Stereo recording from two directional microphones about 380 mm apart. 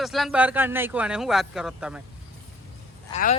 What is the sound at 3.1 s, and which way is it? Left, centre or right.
Speech, centre.